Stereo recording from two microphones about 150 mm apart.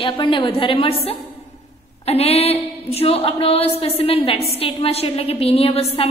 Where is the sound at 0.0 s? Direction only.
35° left (ahead or behind).